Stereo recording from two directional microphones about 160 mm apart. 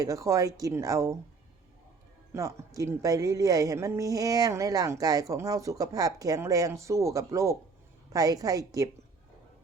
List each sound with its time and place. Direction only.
0.0 s speech: 20° right (ahead or behind)
2.3 s speech: 20° right (ahead or behind)